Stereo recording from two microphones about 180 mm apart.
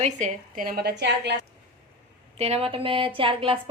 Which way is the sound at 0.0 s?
40° right (ahead or behind).